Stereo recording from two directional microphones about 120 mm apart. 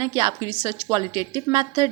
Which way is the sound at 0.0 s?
30° right (ahead or behind).